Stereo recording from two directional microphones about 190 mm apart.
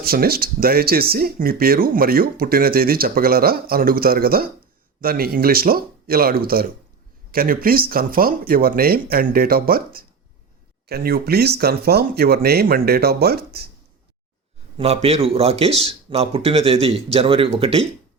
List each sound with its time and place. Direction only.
0.0 s speech: 55° right (ahead or behind)
14.8 s a man's voice: 30° right (ahead or behind)